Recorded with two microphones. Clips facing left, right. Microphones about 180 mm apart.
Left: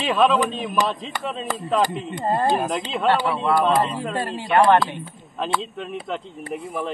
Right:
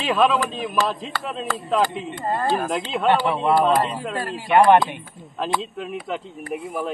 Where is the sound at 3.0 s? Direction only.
20° right (ahead or behind).